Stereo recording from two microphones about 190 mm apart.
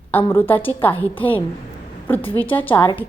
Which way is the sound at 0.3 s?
10° left (ahead or behind).